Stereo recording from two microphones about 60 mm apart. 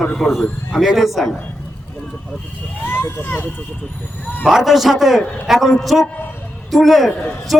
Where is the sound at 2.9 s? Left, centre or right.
Left.